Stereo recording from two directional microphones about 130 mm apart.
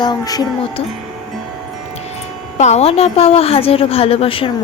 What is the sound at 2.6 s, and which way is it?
A woman's voice, 60° left (ahead or behind).